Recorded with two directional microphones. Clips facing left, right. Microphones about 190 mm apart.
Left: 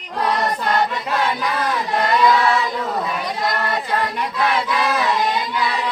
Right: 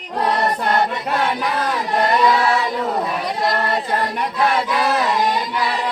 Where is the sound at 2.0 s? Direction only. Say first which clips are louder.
Even; 35° right (ahead or behind).